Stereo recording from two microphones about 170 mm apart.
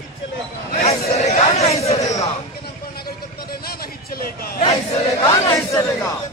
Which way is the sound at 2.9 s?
65° left (ahead or behind).